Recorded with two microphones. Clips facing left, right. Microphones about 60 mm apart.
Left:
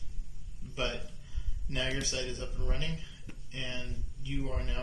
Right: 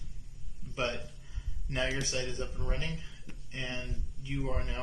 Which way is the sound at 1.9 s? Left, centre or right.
Right.